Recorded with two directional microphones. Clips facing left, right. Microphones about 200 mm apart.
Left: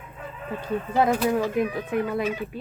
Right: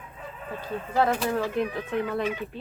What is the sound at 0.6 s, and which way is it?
Speech, 15° left (ahead or behind).